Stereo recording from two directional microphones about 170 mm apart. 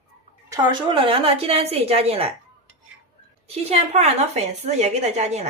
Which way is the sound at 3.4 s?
40° right (ahead or behind).